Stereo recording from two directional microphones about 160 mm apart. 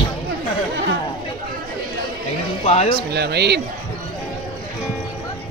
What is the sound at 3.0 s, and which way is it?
Speech, 90° right.